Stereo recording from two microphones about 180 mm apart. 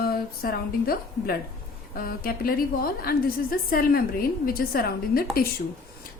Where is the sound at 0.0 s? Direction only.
55° left (ahead or behind).